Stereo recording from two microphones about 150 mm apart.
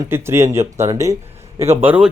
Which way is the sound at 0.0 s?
15° right (ahead or behind).